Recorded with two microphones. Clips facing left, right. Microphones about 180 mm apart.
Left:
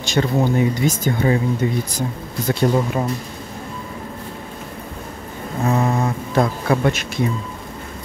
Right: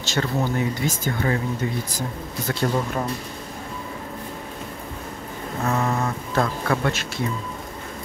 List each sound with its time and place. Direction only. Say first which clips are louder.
0.0 s speech: left 6 dB; 15° left (ahead or behind)
5.7 s speech: left 4 dB; 15° left (ahead or behind)